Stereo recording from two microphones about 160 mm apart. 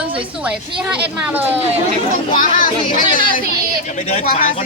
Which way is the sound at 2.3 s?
50° left (ahead or behind).